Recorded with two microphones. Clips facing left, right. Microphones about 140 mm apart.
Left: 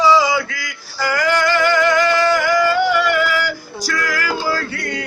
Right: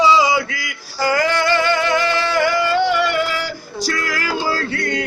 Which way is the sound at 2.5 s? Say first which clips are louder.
Left 2 dB; 25° right (ahead or behind).